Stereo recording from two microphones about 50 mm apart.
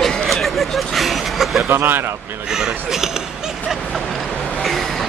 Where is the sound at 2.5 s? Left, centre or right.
Centre.